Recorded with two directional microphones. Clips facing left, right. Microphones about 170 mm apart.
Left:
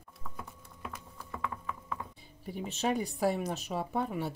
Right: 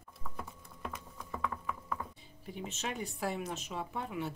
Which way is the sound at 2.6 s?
35° left (ahead or behind).